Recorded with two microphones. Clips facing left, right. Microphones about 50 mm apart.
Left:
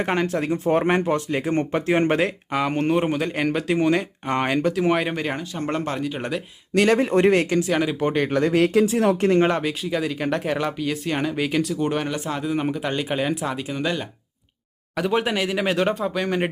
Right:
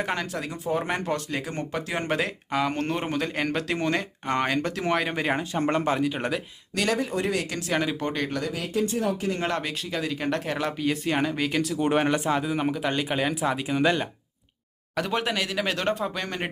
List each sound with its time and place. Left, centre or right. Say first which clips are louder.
0.0 s speech: left 6 dB; left
1.0 s speech: left 6 dB; centre
1.4 s speech: left 8 dB; left
2.5 s speech: left 3 dB; centre
5.1 s speech: right 1 dB; centre
6.9 s speech: left 10 dB; left
7.7 s speech: left 4 dB; centre
8.0 s speech: left 7 dB; left
8.5 s speech: left 10 dB; left
9.6 s speech: left 5 dB; centre
11.8 s speech: right 1 dB; centre
12.3 s speech: left 1 dB; centre
14.9 s speech: left 4 dB; centre